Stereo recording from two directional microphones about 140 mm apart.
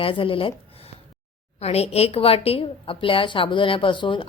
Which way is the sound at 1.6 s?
45° left (ahead or behind).